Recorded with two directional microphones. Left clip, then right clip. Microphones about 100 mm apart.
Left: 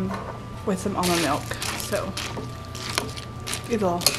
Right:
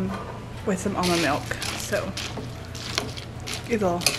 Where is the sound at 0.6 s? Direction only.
Centre (ahead or behind).